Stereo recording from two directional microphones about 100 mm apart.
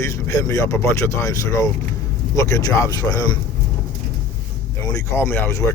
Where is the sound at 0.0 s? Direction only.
35° left (ahead or behind).